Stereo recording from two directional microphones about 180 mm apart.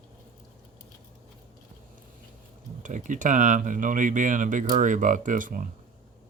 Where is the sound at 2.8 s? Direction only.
45° right (ahead or behind).